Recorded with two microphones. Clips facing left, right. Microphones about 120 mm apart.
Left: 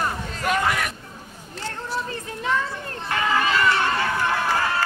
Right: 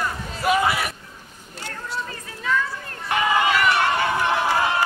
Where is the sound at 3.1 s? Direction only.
20° right (ahead or behind).